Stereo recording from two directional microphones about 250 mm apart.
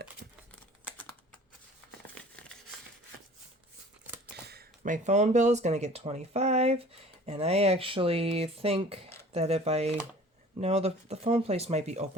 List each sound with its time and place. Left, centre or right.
0.2 s crumpling: right
4.4 s speech: right